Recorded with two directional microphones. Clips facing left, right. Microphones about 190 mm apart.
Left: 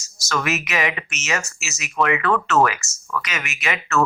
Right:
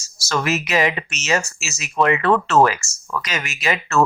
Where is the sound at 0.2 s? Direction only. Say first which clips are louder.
Right 2 dB; 30° right (ahead or behind).